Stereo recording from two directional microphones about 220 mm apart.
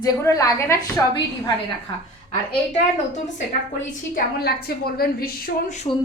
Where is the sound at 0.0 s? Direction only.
15° left (ahead or behind).